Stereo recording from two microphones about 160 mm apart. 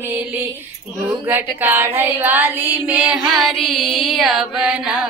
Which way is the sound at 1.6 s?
10° right (ahead or behind).